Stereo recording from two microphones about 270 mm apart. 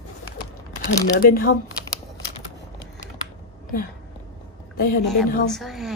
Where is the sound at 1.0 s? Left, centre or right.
Left.